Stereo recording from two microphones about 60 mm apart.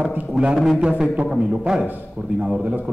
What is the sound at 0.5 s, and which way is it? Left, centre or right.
Speech, centre.